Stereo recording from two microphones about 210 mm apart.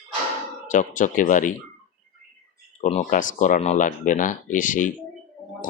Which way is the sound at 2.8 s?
35° left (ahead or behind).